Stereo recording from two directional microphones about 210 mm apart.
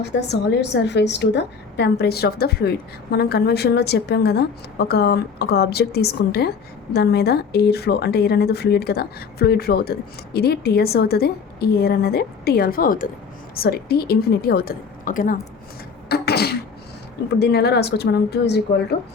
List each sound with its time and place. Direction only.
0.0 s a woman's voice: 55° left (ahead or behind)
16.0 s beatboxing: 50° left (ahead or behind)
17.4 s a woman's voice: 50° left (ahead or behind)